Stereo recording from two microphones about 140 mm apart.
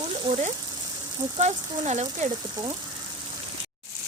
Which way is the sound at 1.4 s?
55° right (ahead or behind).